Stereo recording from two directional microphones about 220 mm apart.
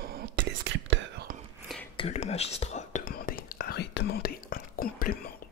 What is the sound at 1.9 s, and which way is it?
Whispering, 30° left (ahead or behind).